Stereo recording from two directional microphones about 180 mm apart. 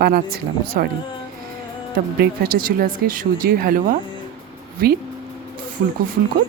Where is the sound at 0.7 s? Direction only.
60° right (ahead or behind).